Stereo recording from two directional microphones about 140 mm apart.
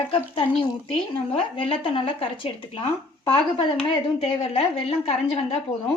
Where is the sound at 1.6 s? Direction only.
40° left (ahead or behind).